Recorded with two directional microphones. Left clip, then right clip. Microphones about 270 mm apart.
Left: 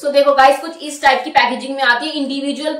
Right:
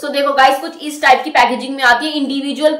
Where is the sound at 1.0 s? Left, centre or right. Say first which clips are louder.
Right 2 dB; centre.